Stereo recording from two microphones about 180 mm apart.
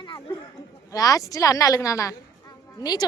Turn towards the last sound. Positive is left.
turn(degrees=20)  # may be behind; listen again after turning